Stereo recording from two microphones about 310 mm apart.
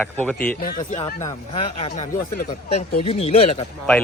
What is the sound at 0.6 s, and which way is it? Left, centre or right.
Speech, left.